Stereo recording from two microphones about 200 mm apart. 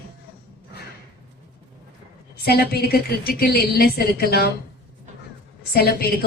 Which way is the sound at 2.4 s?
50° left (ahead or behind).